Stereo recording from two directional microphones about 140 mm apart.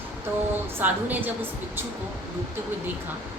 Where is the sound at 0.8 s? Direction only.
15° right (ahead or behind).